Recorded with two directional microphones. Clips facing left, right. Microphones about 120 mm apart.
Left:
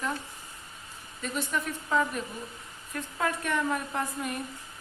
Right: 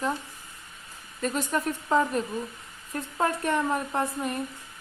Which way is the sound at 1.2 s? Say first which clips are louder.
Right 5 dB; 40° right (ahead or behind).